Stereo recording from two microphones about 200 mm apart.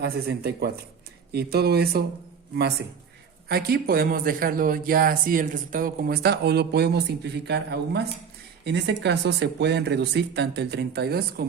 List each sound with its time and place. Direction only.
0.0 s speech: 50° right (ahead or behind)
3.5 s speech: 50° right (ahead or behind)